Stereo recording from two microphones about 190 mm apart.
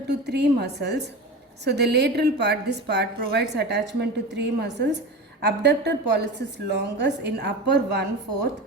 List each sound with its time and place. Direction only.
0.1 s a woman's voice: 60° right (ahead or behind)